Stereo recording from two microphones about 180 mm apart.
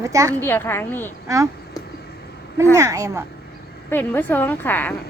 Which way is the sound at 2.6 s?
15° right (ahead or behind).